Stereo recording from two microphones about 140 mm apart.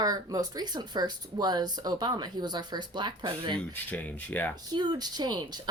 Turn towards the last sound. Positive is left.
turn(degrees=-30)  # may be behind; listen again after turning